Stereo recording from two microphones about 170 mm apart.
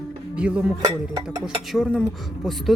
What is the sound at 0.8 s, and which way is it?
Speech, 25° right (ahead or behind).